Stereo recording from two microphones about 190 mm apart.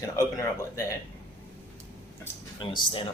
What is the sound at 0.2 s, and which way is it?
Speech, 15° left (ahead or behind).